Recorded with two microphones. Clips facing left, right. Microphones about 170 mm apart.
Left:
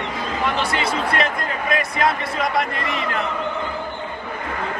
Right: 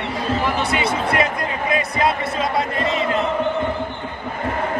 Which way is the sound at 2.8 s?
25° right (ahead or behind).